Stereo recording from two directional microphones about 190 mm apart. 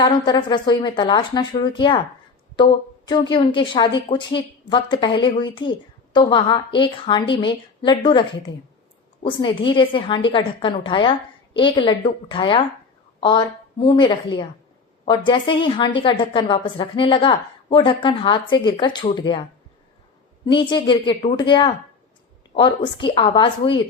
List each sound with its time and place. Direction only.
0.0 s a woman's voice: 25° left (ahead or behind)
3.1 s a woman's voice: 25° left (ahead or behind)
20.4 s a woman's voice: 25° left (ahead or behind)